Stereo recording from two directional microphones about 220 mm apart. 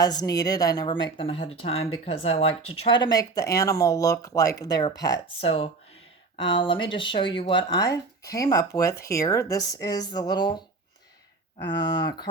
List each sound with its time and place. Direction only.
0.0 s speech: 15° left (ahead or behind)